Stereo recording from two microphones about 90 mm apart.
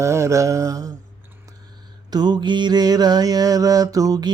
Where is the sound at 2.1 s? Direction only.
50° right (ahead or behind).